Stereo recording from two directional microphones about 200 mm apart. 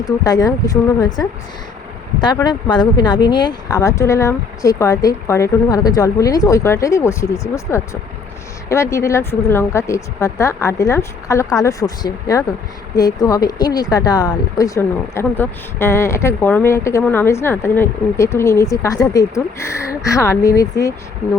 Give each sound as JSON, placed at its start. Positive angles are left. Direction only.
{"t": 0.0, "sound": "speech", "side_deg": 20}